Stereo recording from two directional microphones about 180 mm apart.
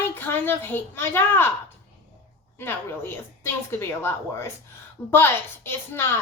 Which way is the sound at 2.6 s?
10° left (ahead or behind).